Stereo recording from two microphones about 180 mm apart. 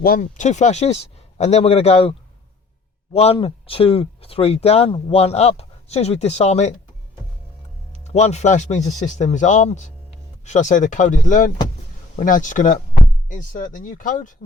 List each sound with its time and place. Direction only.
0.0 s speech: 50° left (ahead or behind)
8.0 s speech: 40° left (ahead or behind)